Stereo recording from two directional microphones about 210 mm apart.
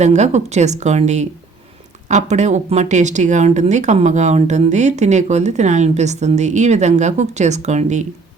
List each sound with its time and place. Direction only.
0.0 s speech: 35° right (ahead or behind)